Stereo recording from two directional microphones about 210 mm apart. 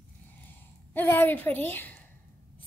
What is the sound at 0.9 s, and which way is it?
A woman's voice, 10° left (ahead or behind).